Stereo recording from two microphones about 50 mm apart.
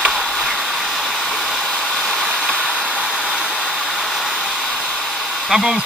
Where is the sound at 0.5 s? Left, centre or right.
Centre.